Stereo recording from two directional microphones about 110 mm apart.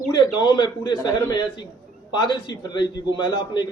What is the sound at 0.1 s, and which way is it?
A man's voice, 40° left (ahead or behind).